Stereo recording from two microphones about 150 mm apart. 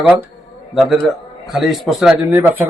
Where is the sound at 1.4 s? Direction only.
Centre (ahead or behind).